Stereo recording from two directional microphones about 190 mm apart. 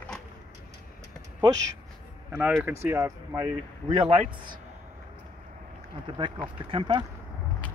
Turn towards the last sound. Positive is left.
turn(degrees=-25)  # may be behind; listen again after turning